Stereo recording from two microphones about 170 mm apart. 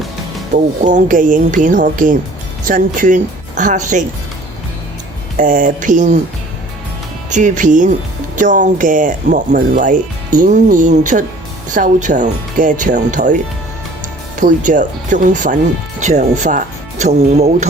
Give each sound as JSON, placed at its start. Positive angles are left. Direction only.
{"t": 0.8, "sound": "speech", "side_deg": -45}
{"t": 5.4, "sound": "speech", "side_deg": -50}
{"t": 7.3, "sound": "speech", "side_deg": -45}